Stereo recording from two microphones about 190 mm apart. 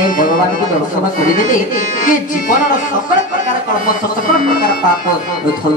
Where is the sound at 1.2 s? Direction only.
45° left (ahead or behind).